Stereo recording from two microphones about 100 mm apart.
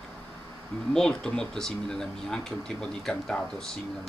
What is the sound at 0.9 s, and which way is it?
Speech, 5° left (ahead or behind).